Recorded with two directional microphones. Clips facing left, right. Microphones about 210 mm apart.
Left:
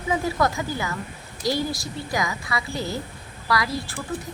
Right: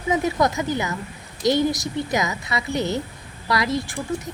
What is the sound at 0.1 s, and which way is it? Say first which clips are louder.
A woman's voice: right 3 dB; 20° right (ahead or behind).